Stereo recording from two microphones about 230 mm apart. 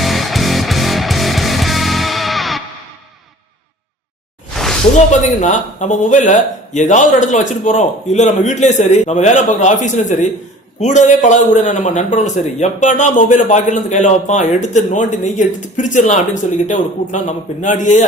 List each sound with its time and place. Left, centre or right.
0.0 s music: centre
5.4 s a man's voice: left